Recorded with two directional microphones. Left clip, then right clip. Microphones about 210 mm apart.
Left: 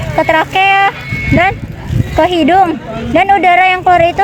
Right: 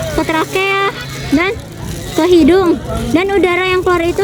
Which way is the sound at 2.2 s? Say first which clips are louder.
Left 1 dB; 50° left (ahead or behind).